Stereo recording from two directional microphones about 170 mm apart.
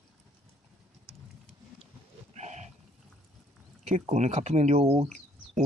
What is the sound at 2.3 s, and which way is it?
Pig, 45° right (ahead or behind).